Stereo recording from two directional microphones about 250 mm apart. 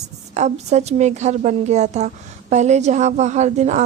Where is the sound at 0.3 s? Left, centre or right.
Right.